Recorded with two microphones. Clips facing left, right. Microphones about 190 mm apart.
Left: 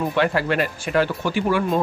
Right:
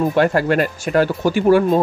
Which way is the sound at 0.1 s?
45° right (ahead or behind).